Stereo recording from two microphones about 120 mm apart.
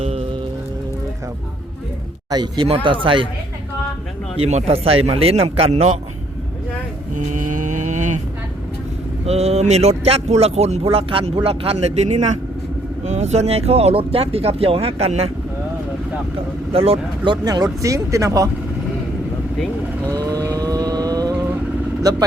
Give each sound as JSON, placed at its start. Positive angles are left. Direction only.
{"t": 2.3, "sound": "speech", "side_deg": -35}
{"t": 2.6, "sound": "speech", "side_deg": -50}
{"t": 4.4, "sound": "speech", "side_deg": -65}
{"t": 7.1, "sound": "cattle", "side_deg": -90}
{"t": 9.2, "sound": "speech", "side_deg": -60}
{"t": 16.7, "sound": "speech", "side_deg": -50}
{"t": 17.4, "sound": "speech", "side_deg": -30}
{"t": 20.1, "sound": "a sound", "side_deg": -30}
{"t": 22.0, "sound": "speech", "side_deg": -35}